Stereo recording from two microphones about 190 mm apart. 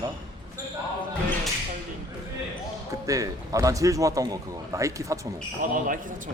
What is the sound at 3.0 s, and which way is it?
A man's voice, 15° right (ahead or behind).